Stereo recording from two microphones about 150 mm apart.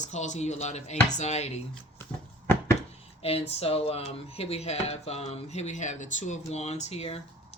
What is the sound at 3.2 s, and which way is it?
Speech, 40° left (ahead or behind).